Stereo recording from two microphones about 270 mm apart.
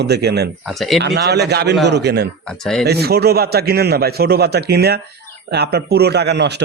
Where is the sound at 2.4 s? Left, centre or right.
Centre.